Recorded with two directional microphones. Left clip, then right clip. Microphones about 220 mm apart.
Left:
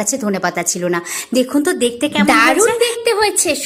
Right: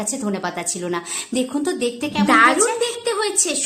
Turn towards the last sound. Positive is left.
turn(degrees=20)  # may be behind; listen again after turning